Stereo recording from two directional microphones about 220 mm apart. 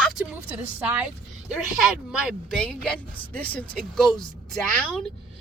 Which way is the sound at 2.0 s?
5° right (ahead or behind).